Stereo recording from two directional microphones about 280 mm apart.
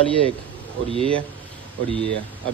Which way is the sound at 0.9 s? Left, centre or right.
Centre.